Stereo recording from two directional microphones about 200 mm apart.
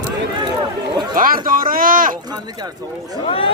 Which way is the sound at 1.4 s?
45° right (ahead or behind).